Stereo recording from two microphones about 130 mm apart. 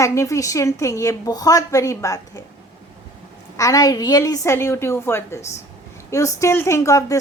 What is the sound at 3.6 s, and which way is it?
A woman's voice, 25° left (ahead or behind).